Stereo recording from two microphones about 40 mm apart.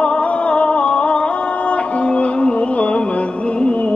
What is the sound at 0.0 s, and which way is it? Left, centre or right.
Music, left.